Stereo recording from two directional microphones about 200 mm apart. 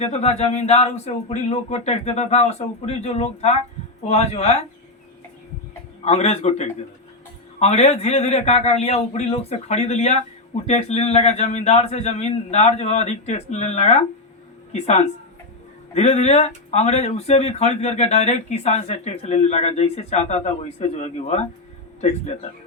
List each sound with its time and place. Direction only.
0.0 s speech: 35° left (ahead or behind)
6.1 s speech: 30° left (ahead or behind)